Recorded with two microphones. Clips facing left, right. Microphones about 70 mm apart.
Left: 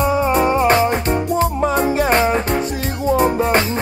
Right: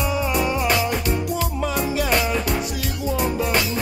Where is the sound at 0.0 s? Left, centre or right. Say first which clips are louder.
Left 7 dB; left.